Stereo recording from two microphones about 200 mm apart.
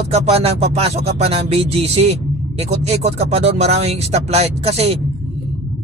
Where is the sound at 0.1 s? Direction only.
30° right (ahead or behind).